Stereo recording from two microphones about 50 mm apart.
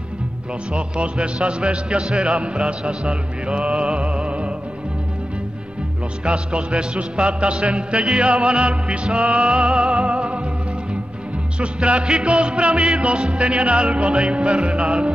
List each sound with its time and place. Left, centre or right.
0.7 s music: centre
6.2 s music: centre
11.9 s music: centre
14.1 s music: centre